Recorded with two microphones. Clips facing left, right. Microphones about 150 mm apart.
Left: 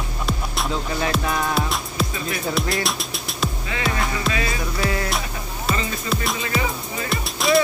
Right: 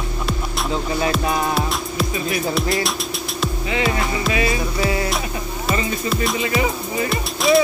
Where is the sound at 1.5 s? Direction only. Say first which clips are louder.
Right 2 dB; centre (ahead or behind).